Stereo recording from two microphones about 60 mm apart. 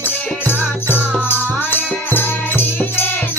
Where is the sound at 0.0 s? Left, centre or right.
Left.